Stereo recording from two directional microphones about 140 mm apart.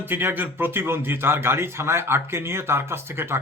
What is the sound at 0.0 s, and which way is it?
A man's voice, 15° right (ahead or behind).